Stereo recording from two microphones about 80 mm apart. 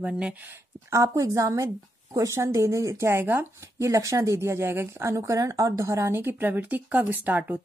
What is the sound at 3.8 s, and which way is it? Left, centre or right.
A woman's voice, right.